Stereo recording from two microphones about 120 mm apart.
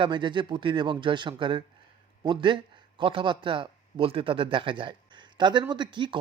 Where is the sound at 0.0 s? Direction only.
40° right (ahead or behind).